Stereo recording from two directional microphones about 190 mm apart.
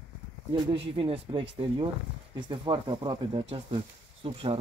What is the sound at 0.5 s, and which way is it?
Speech, 30° right (ahead or behind).